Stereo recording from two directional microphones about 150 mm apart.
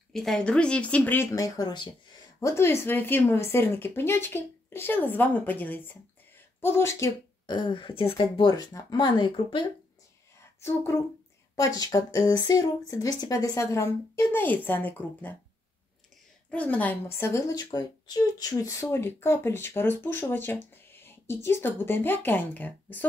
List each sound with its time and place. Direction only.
0.1 s speech: 5° left (ahead or behind); by 2.0 s 30° left (ahead or behind)
2.4 s speech: 15° left (ahead or behind)
6.3 s a sound: 15° left (ahead or behind)
7.5 s speech: 30° left (ahead or behind)
10.6 s speech: 15° left (ahead or behind)
16.4 s speech: 10° left (ahead or behind)